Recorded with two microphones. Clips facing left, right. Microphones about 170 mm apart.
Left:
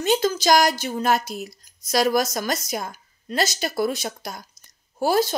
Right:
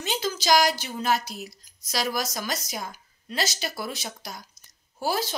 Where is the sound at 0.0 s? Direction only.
50° left (ahead or behind).